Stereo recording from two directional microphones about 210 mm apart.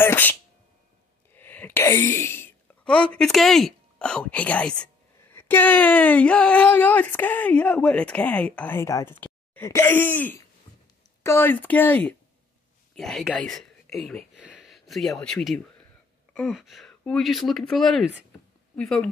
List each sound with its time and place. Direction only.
0.0 s sneeze: 10° left (ahead or behind)
1.3 s speech: 10° left (ahead or behind)